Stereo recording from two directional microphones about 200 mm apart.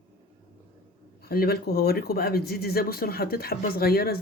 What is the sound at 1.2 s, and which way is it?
Speech, 50° left (ahead or behind).